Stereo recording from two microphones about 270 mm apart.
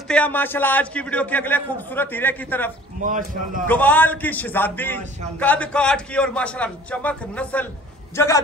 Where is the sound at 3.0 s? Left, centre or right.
Right.